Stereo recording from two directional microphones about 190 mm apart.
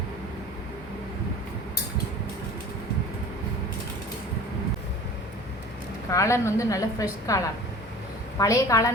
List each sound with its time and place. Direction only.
6.1 s a woman's voice: 15° left (ahead or behind)